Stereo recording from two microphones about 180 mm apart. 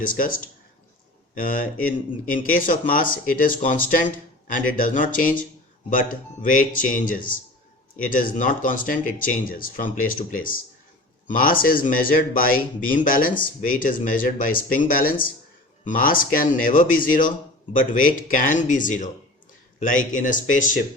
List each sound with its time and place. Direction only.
0.0 s a man's voice: 50° left (ahead or behind)